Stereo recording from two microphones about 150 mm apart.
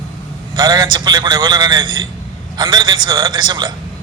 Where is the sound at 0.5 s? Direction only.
25° right (ahead or behind).